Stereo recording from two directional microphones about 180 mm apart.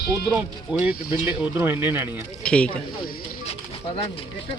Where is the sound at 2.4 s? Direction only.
5° left (ahead or behind).